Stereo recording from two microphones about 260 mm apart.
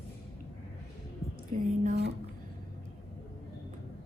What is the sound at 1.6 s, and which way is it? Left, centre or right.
Speech, right.